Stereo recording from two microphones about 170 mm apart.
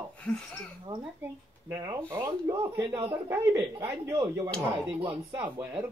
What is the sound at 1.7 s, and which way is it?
Speech, 20° right (ahead or behind).